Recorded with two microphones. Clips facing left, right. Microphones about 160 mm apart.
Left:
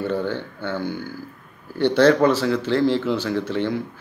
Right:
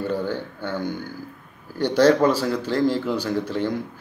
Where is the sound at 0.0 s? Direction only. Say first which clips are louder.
Left 1 dB; 10° right (ahead or behind).